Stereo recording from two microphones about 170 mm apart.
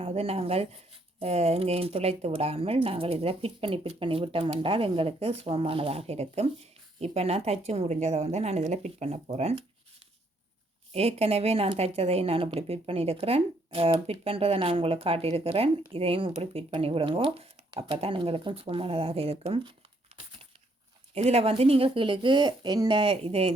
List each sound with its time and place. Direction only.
0.0 s a woman's voice: 35° right (ahead or behind)
10.9 s a woman's voice: 35° right (ahead or behind)
21.1 s a woman's voice: 40° right (ahead or behind)